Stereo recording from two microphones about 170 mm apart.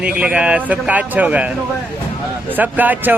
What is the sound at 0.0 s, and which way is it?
Speech, 5° right (ahead or behind).